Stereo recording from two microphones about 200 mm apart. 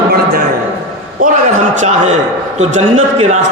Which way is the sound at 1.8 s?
35° right (ahead or behind).